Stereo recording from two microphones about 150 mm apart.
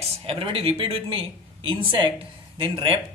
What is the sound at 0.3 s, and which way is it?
Speech, 40° right (ahead or behind).